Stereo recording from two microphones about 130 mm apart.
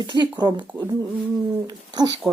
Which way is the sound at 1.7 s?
35° right (ahead or behind).